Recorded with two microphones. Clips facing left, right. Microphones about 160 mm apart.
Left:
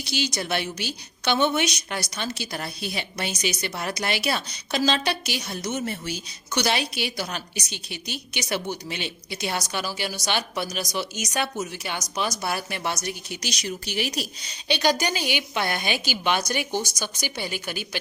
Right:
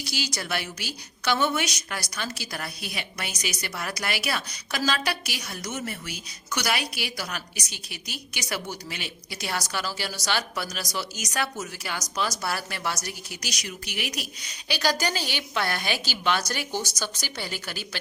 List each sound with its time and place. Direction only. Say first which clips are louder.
0.0 s a woman's voice: left 4 dB; 25° left (ahead or behind)